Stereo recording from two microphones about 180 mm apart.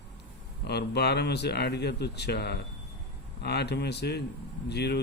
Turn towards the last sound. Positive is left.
turn(degrees=65)  # may be behind; listen again after turning